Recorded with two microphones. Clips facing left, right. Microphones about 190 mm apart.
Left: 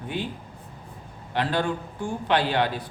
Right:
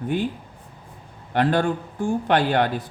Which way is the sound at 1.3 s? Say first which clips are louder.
Right 5 dB; 50° right (ahead or behind).